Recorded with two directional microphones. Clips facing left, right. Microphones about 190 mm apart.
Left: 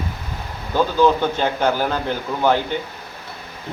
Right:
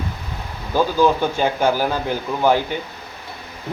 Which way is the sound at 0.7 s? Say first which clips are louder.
Even; 10° right (ahead or behind).